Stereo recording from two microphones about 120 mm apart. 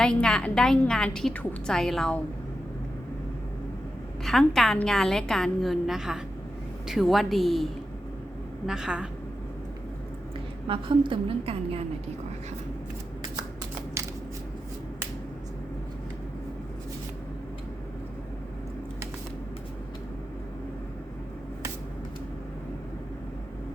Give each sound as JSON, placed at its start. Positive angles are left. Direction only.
{"t": 0.0, "sound": "a woman's voice", "side_deg": 5}
{"t": 4.2, "sound": "a woman's voice", "side_deg": 0}
{"t": 10.7, "sound": "a woman's voice", "side_deg": -45}
{"t": 14.0, "sound": "scissors", "side_deg": -25}